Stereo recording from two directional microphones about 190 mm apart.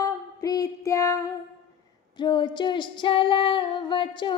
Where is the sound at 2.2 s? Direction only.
25° left (ahead or behind).